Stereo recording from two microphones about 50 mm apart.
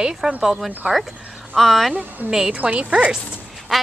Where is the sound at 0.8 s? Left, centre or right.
Right.